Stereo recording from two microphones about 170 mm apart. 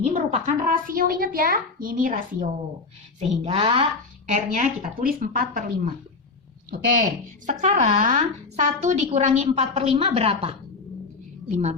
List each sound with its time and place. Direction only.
0.1 s a child's voice: 50° right (ahead or behind)
3.4 s a woman's voice: 30° right (ahead or behind)
4.4 s a child's voice: 50° right (ahead or behind)
7.4 s a woman's voice: 45° right (ahead or behind)